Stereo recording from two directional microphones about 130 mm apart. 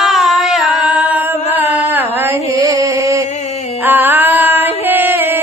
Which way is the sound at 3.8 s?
15° right (ahead or behind).